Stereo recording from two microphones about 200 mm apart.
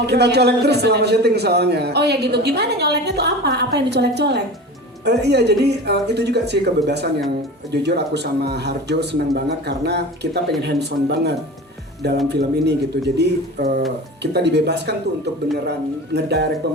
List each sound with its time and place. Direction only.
0.0 s speech: 55° right (ahead or behind)